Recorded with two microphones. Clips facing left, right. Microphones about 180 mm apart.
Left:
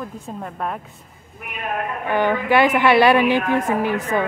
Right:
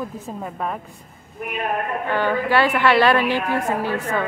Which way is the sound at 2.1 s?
15° left (ahead or behind).